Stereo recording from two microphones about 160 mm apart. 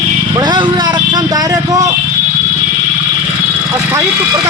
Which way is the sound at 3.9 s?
20° right (ahead or behind).